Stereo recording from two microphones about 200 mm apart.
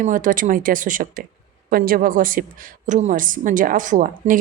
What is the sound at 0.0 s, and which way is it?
A woman's voice, 40° right (ahead or behind).